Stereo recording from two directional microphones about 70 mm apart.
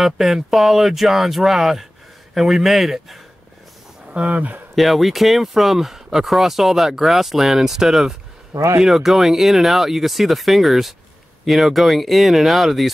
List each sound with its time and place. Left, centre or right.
0.0 s speech: centre
4.1 s speech: centre
4.7 s speech: centre
8.5 s speech: right
8.8 s speech: centre